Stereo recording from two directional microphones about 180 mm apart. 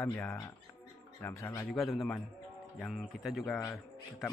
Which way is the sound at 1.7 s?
Centre (ahead or behind).